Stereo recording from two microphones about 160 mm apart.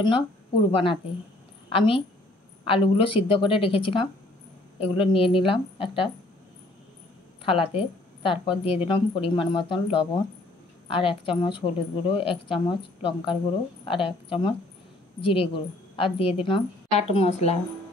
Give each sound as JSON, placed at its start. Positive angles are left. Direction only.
{"t": 0.7, "sound": "speech", "side_deg": 30}
{"t": 7.4, "sound": "speech", "side_deg": 35}